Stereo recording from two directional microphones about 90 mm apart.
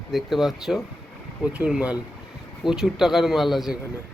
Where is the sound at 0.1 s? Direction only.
Centre (ahead or behind).